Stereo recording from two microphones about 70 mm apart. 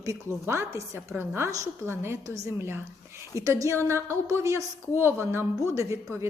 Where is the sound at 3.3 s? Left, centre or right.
Right.